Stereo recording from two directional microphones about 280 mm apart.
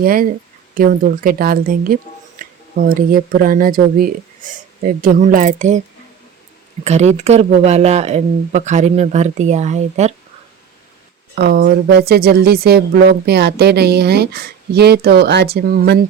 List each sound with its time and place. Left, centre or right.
0.0 s speech: right
6.8 s speech: right
11.3 s speech: right